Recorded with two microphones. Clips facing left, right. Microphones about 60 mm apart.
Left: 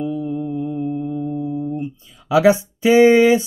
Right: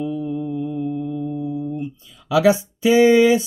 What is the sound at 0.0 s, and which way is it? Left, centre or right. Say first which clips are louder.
Mantra: left 1 dB; left.